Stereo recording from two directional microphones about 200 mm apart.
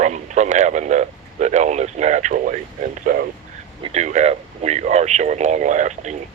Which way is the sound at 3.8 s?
35° right (ahead or behind).